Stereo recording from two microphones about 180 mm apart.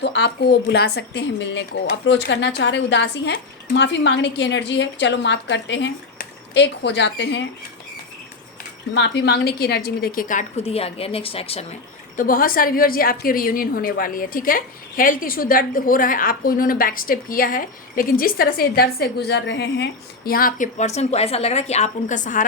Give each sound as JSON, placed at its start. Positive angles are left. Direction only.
{"t": 0.0, "sound": "speech", "side_deg": 70}
{"t": 9.0, "sound": "a woman's voice", "side_deg": 65}
{"t": 12.1, "sound": "a woman's voice", "side_deg": 50}